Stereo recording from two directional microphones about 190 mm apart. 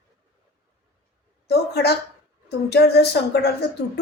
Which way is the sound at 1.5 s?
60° left (ahead or behind).